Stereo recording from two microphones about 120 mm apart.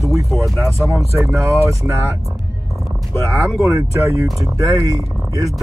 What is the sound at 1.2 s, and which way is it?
Speech, 20° right (ahead or behind).